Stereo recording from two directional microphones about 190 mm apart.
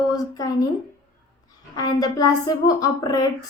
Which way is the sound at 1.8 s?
20° left (ahead or behind).